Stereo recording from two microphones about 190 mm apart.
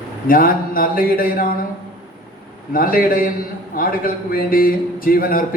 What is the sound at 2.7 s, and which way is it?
A man's voice, 50° left (ahead or behind).